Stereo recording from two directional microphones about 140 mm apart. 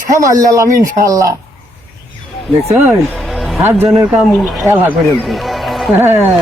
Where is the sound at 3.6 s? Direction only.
10° right (ahead or behind).